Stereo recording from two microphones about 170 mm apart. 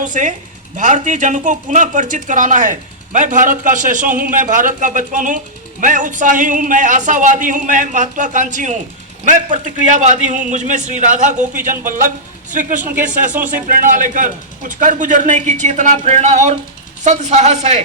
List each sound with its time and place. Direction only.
0.0 s a woman's voice: 50° right (ahead or behind)